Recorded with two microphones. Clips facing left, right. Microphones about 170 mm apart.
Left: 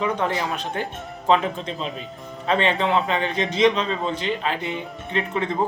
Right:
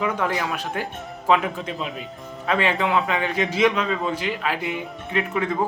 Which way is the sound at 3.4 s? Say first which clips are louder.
Left 2 dB; 5° right (ahead or behind).